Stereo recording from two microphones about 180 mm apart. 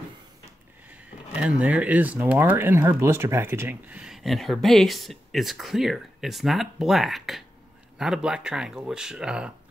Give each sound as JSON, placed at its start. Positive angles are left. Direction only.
{"t": 1.6, "sound": "speech", "side_deg": -5}